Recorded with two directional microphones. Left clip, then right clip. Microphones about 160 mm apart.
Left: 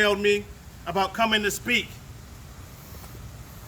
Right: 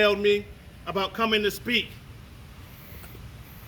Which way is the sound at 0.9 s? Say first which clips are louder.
Left 2 dB; 20° left (ahead or behind).